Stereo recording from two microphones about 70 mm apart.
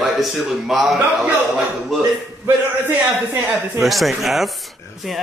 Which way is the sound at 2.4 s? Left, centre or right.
Right.